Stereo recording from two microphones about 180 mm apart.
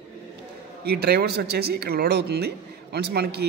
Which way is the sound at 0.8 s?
65° right (ahead or behind).